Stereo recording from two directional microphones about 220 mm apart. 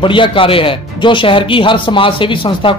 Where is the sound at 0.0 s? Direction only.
20° left (ahead or behind).